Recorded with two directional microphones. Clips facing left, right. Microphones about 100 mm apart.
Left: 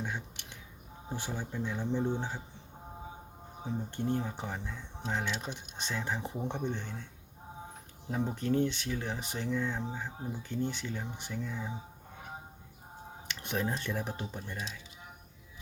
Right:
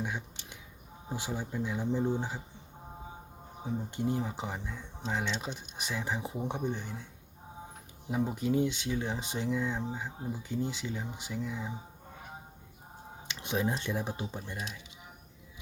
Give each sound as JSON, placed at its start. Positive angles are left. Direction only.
{"t": 0.0, "sound": "a sound", "side_deg": -15}
{"t": 1.1, "sound": "speech", "side_deg": -15}
{"t": 3.7, "sound": "speech", "side_deg": -15}
{"t": 13.2, "sound": "speech", "side_deg": -15}